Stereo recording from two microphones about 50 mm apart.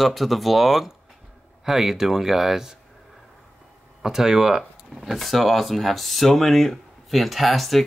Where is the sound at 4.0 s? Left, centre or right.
Centre.